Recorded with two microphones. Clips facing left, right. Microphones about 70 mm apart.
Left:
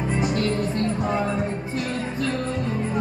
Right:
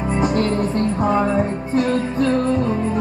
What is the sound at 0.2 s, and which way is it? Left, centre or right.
Music, right.